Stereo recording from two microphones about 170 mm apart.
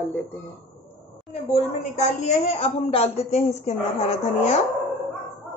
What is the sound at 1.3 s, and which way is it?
A woman's voice, 40° left (ahead or behind).